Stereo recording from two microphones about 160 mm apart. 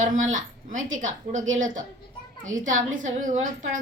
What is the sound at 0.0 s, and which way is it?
A woman's voice, 50° right (ahead or behind).